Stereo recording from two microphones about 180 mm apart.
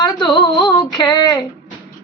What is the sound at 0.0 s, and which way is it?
Female singing, 25° left (ahead or behind).